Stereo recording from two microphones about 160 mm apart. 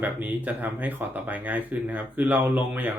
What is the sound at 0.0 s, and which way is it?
Speech, 10° right (ahead or behind).